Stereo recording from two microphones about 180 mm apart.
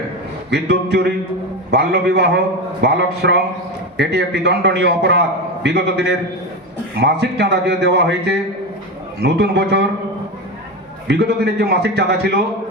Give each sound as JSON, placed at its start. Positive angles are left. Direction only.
{"t": 0.5, "sound": "a man's voice", "side_deg": -65}
{"t": 11.1, "sound": "speech", "side_deg": -65}